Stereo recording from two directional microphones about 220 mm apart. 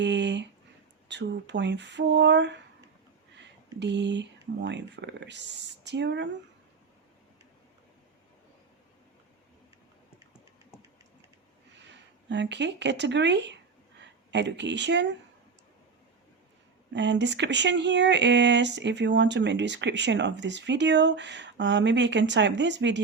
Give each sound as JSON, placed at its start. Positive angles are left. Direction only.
{"t": 0.0, "sound": "a sound", "side_deg": -55}
{"t": 1.0, "sound": "speech", "side_deg": -50}
{"t": 3.8, "sound": "speech", "side_deg": -55}
{"t": 11.9, "sound": "speech", "side_deg": -55}
{"t": 16.9, "sound": "speech", "side_deg": -55}